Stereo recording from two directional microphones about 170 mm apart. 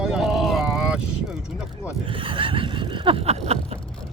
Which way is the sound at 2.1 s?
30° right (ahead or behind).